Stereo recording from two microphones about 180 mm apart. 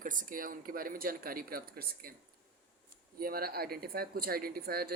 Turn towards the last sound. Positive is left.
turn(degrees=-60)  # may be behind; listen again after turning